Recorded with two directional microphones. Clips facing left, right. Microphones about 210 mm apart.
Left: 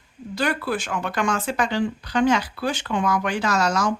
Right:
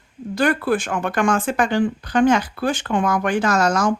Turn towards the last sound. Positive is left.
turn(degrees=-50)  # may be behind; listen again after turning